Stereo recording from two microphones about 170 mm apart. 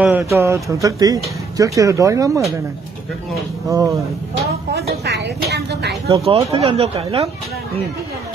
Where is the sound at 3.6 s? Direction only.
20° right (ahead or behind).